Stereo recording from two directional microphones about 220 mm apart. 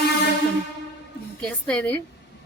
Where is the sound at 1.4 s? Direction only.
5° left (ahead or behind).